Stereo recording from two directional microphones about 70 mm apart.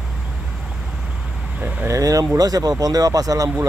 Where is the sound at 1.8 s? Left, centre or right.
Right.